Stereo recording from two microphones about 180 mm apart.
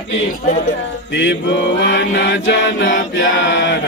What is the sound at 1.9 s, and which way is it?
Chant, 85° left.